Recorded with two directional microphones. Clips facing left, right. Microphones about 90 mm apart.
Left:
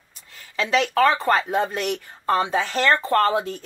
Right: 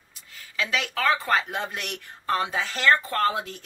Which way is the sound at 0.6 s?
35° left (ahead or behind).